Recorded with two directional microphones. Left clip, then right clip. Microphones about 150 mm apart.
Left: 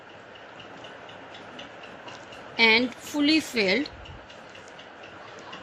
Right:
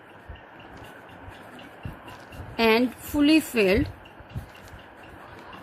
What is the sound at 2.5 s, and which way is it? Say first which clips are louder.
A woman's voice: left 1 dB; 65° right (ahead or behind).